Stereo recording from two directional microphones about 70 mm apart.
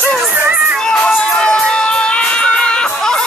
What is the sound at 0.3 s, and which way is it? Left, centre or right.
Children playing, right.